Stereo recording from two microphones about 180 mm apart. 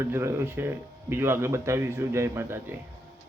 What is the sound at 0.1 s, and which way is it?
A man's voice, 15° right (ahead or behind).